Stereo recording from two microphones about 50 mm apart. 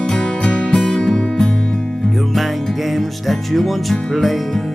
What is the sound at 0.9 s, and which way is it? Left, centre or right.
Music, centre.